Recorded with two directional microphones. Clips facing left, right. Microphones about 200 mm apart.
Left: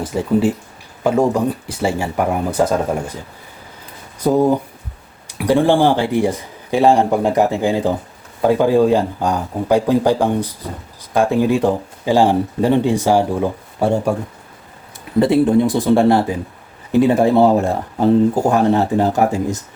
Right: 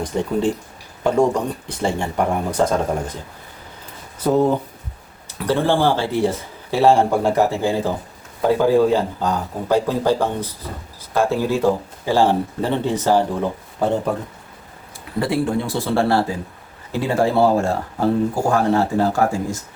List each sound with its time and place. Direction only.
0.0 s speech: 5° left (ahead or behind)
4.2 s speech: 10° left (ahead or behind)
15.2 s speech: 20° left (ahead or behind)